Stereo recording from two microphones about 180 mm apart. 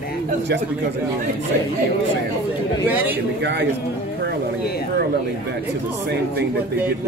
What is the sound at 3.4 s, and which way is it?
Speech, 70° right (ahead or behind).